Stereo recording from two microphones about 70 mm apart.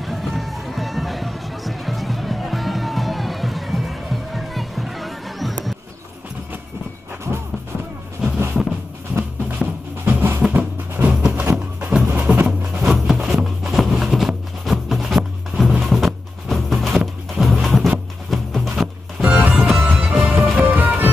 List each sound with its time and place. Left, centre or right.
0.0 s music: centre
8.2 s music: centre
9.6 s music: right
12.1 s music: right
12.8 s music: centre
19.3 s music: right